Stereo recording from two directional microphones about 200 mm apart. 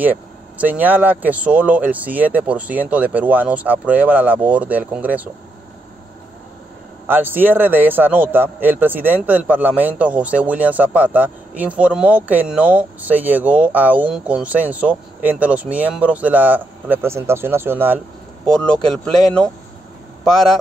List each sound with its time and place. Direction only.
0.0 s a man's voice: 10° right (ahead or behind)
7.1 s a man's voice: 10° right (ahead or behind)
18.4 s speech: 5° left (ahead or behind)